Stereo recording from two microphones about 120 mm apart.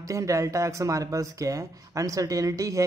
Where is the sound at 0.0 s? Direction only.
25° right (ahead or behind).